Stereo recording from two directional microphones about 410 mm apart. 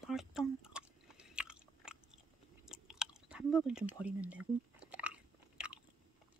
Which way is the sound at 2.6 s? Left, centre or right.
Centre.